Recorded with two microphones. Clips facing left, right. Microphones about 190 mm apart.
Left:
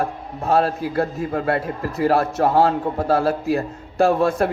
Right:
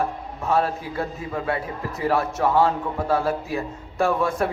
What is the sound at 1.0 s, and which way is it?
Speech, 60° left (ahead or behind).